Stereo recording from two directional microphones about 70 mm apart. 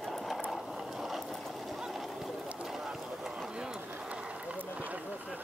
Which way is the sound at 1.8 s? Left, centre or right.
Centre.